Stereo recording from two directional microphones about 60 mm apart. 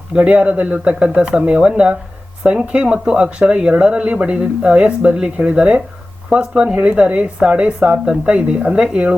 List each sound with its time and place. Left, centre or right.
0.2 s speech: right